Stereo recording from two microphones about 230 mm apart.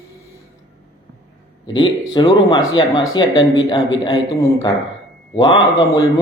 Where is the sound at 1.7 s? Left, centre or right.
Centre.